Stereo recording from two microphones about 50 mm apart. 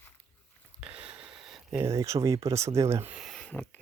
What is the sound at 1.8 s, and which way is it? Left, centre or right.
Speech, right.